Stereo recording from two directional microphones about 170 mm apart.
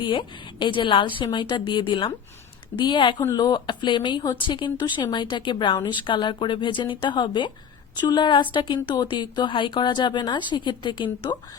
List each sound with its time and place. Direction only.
0.0 s speech: 30° left (ahead or behind)